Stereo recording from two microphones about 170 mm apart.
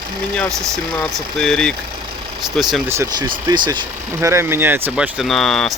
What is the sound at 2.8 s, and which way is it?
Speech, 15° right (ahead or behind).